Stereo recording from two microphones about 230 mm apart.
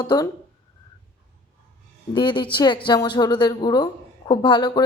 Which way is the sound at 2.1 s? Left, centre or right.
Centre.